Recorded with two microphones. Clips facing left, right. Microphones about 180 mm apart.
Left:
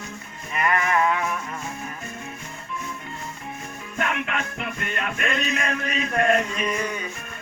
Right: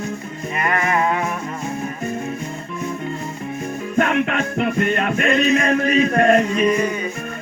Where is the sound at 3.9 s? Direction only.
35° right (ahead or behind).